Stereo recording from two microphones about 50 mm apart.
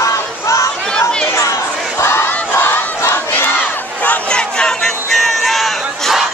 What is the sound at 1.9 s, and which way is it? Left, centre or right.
Battle cry, left.